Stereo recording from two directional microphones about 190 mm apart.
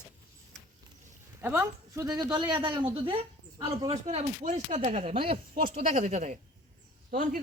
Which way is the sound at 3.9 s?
35° right (ahead or behind).